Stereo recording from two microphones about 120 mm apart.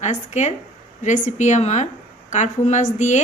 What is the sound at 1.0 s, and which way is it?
A woman's voice, 90° left.